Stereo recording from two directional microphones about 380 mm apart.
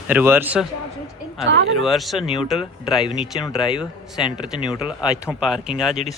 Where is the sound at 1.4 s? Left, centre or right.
Right.